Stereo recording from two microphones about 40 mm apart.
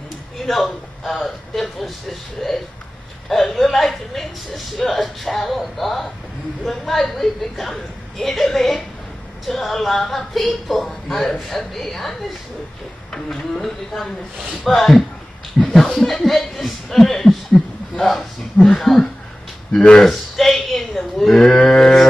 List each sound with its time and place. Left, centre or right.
0.5 s a man's voice: centre
18.6 s speech: centre
19.7 s speech: left
20.0 s cattle: centre
21.4 s speech: centre